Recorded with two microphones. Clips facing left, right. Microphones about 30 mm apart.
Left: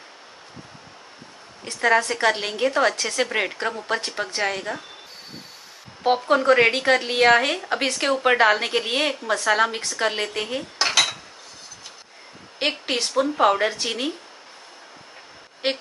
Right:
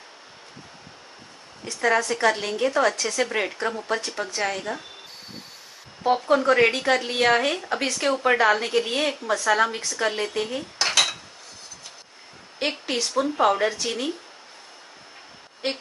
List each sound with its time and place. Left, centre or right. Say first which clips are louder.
1.6 s a woman's voice: left 2 dB; left
3.2 s speech: left 1 dB; left
3.8 s a woman's voice: left 1 dB; left
4.4 s speech: left 2 dB; left
6.3 s a woman's voice: left 2 dB; left
7.0 s a woman's voice: left 3 dB; left
10.8 s dishes: left 1 dB; centre
12.5 s a woman's voice: left 2 dB; left
15.6 s a woman's voice: left 3 dB; left